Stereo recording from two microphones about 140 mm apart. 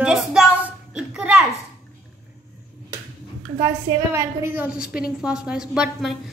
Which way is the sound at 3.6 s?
25° right (ahead or behind).